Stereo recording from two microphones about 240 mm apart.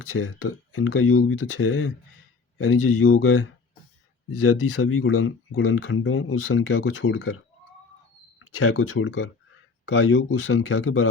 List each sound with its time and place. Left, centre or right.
0.2 s speech: left